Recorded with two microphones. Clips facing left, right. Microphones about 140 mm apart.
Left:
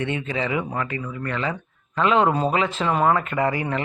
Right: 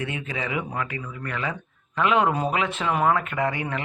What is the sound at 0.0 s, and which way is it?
Speech, 10° right (ahead or behind).